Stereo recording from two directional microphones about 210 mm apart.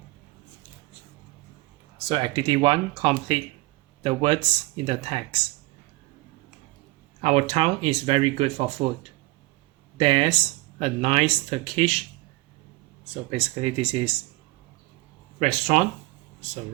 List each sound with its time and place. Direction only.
2.0 s speech: 20° right (ahead or behind)
7.2 s speech: 30° right (ahead or behind)
10.0 s speech: 25° right (ahead or behind)
13.3 s speech: 25° right (ahead or behind)
15.4 s speech: 35° right (ahead or behind)